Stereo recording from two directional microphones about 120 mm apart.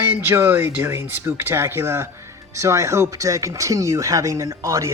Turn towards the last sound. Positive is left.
turn(degrees=-25)  # may be behind; listen again after turning